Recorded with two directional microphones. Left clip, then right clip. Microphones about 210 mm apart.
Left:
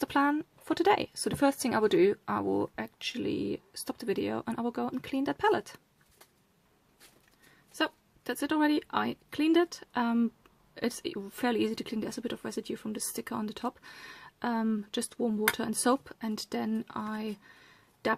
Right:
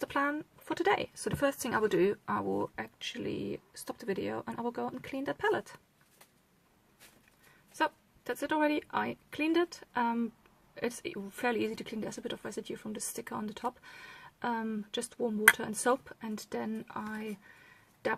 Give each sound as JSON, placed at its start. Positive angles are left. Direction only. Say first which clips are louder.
{"t": 0.0, "sound": "speech", "louder": "left 4 dB", "side_deg": 35}
{"t": 7.8, "sound": "speech", "louder": "even", "side_deg": 30}